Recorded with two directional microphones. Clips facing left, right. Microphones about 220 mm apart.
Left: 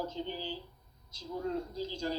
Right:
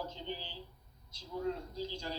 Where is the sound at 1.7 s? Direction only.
45° left (ahead or behind).